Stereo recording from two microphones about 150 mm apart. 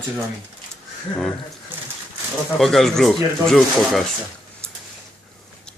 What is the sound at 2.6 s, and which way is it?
Speech, centre (ahead or behind).